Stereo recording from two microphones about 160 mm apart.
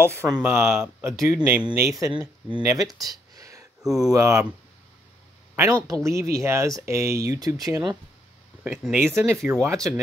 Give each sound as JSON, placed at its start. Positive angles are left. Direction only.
{"t": 0.0, "sound": "speech", "side_deg": -15}
{"t": 1.9, "sound": "speech", "side_deg": -20}
{"t": 5.6, "sound": "speech", "side_deg": -20}
{"t": 8.6, "sound": "speech", "side_deg": -10}